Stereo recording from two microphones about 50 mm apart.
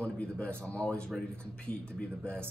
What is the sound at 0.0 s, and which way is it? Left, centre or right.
Speech, left.